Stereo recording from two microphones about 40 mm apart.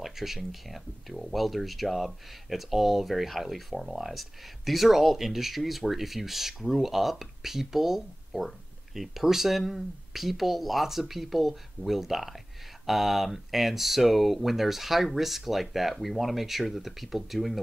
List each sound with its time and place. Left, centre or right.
0.0 s speech: centre